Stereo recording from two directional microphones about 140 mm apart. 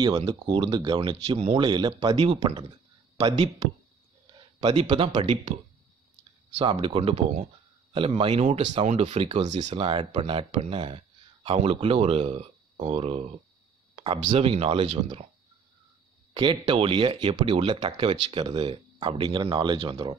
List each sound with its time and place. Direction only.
0.3 s speech: 30° right (ahead or behind)
2.1 s speech: 45° right (ahead or behind)
4.8 s speech: 35° right (ahead or behind)
6.5 s speech: 45° right (ahead or behind)
9.8 s speech: 40° right (ahead or behind)
16.3 s speech: 35° right (ahead or behind)